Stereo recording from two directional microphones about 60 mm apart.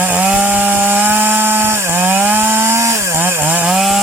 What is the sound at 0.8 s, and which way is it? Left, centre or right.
Wood, right.